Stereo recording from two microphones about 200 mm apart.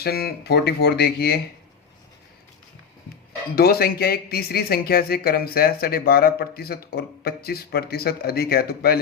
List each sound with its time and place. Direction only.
0.0 s speech: 50° left (ahead or behind)
3.5 s speech: 50° left (ahead or behind)